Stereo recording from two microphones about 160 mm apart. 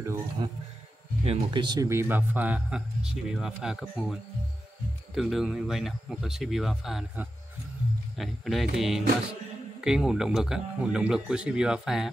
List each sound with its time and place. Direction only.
0.0 s speech: 15° right (ahead or behind)
1.2 s speech: 35° right (ahead or behind); by 12.1 s 5° right (ahead or behind)